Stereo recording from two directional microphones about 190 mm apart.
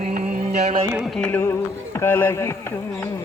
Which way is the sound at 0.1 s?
45° right (ahead or behind).